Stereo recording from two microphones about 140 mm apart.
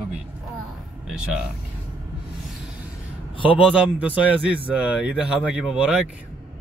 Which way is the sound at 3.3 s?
40° left (ahead or behind).